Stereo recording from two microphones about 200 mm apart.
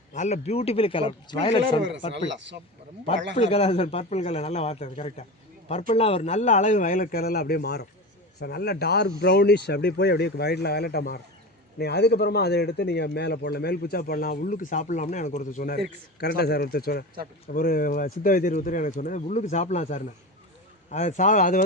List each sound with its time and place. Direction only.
0.1 s a man's voice: 35° left (ahead or behind)
2.1 s speech: 60° right (ahead or behind)
3.3 s a man's voice: 30° left (ahead or behind)
16.2 s a man's voice: 55° left (ahead or behind)